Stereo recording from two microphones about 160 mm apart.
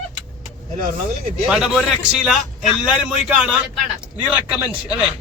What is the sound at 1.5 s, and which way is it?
A man's voice, 5° right (ahead or behind).